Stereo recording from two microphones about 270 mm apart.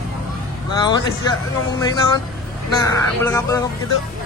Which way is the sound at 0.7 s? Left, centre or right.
Centre.